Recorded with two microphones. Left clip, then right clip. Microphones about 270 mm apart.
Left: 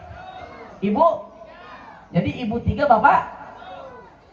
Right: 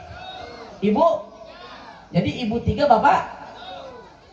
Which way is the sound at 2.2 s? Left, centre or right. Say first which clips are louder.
Right 1 dB; right.